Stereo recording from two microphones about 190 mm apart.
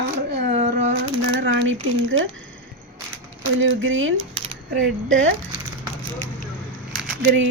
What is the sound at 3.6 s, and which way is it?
Speech, 85° right.